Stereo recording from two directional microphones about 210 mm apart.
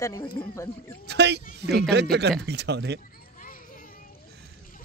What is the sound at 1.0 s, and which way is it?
Speech, 55° right (ahead or behind).